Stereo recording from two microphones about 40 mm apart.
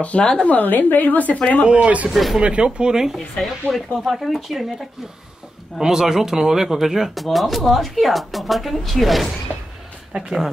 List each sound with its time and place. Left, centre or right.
0.2 s a woman's voice: left
0.5 s a woman's voice: left
1.6 s speech: right
3.3 s speech: centre
5.8 s speech: centre